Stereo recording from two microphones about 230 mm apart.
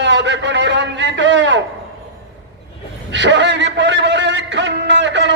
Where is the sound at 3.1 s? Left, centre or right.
Right.